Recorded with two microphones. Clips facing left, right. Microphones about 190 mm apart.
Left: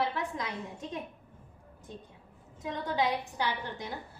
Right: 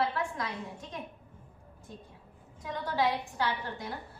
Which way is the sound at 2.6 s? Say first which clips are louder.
Even; 20° left (ahead or behind).